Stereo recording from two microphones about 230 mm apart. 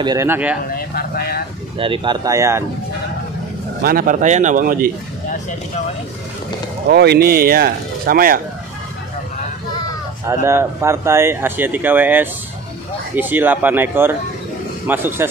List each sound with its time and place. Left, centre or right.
0.0 s speech: centre
0.7 s speech: left
1.8 s speech: right
3.8 s speech: right
6.9 s speech: right
10.2 s speech: centre